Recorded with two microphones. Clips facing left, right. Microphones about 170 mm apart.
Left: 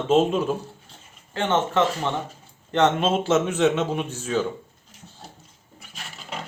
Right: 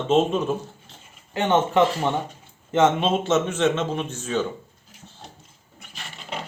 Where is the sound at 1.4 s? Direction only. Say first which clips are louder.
Right 3 dB; 15° right (ahead or behind).